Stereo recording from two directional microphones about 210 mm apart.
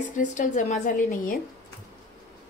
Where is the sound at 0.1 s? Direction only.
35° left (ahead or behind).